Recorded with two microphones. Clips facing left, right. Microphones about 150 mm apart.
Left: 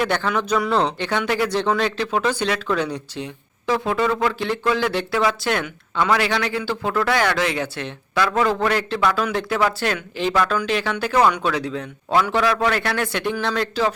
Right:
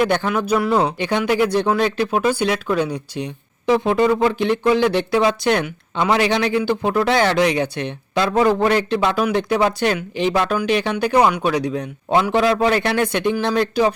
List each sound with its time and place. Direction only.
0.0 s speech: 15° right (ahead or behind)